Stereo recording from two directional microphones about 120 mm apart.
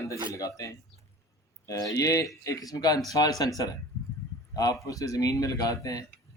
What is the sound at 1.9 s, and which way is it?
Speech, 30° left (ahead or behind).